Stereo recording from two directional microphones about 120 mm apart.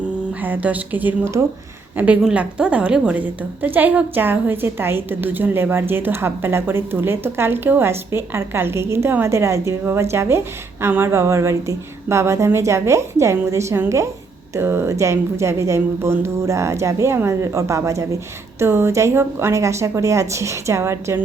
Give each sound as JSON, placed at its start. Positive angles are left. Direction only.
{"t": 0.4, "sound": "a woman's voice", "side_deg": -15}
{"t": 2.0, "sound": "a woman's voice", "side_deg": -10}